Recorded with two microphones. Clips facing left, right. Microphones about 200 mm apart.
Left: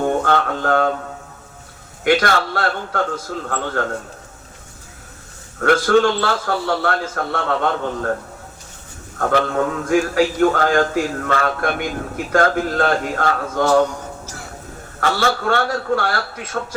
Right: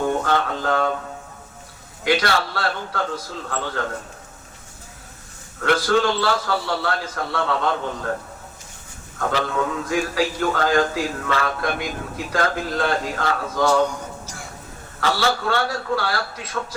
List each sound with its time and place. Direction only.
0.0 s a sound: 55° left (ahead or behind)
2.0 s a man's voice: 50° left (ahead or behind)
5.5 s a man's voice: 50° left (ahead or behind)
9.1 s a man's voice: 50° left (ahead or behind)
15.0 s a man's voice: 50° left (ahead or behind)